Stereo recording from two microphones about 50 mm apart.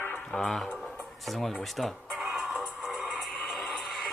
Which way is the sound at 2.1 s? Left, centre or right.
Centre.